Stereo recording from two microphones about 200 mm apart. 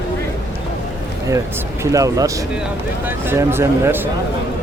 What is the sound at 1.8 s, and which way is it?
Speech, 15° right (ahead or behind).